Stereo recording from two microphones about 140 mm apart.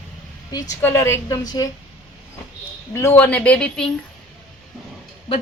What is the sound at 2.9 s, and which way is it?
Speech, 15° left (ahead or behind).